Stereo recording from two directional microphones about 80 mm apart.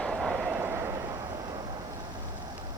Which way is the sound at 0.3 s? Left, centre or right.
Centre.